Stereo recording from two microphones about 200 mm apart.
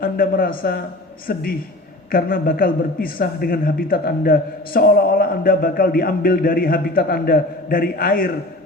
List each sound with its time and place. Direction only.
0.0 s a man's voice: 45° left (ahead or behind)